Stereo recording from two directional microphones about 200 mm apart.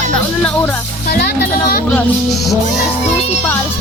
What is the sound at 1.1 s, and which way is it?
Speech, 50° left (ahead or behind).